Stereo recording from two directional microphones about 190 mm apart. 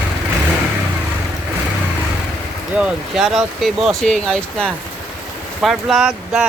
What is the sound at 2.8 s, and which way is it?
Speech, centre (ahead or behind).